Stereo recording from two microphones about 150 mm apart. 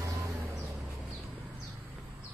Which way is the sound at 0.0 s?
20° right (ahead or behind).